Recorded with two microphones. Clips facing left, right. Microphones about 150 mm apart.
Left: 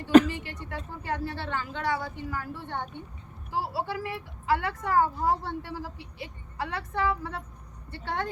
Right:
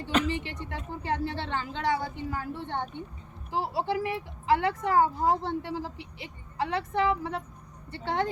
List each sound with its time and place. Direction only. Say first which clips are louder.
0.3 s speech: right 3 dB; 25° right (ahead or behind)